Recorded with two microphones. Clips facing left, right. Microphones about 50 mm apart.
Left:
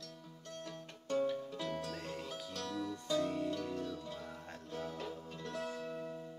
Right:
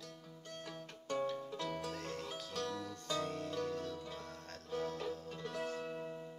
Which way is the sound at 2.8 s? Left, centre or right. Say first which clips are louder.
Left 4 dB; centre.